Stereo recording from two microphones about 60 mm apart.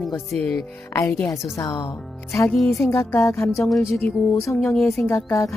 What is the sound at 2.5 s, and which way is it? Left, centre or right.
Speech, centre.